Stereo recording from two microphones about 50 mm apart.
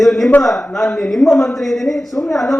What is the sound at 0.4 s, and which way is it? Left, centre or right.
Speech, centre.